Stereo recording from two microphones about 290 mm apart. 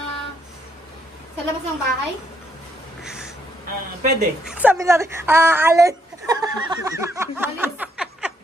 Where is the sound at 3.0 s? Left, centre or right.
Centre.